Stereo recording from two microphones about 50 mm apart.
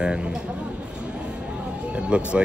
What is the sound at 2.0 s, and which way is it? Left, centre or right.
Speech, right.